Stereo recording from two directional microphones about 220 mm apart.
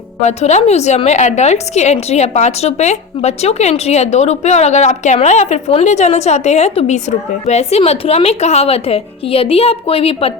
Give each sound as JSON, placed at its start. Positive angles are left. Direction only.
{"t": 0.3, "sound": "a woman's voice", "side_deg": 30}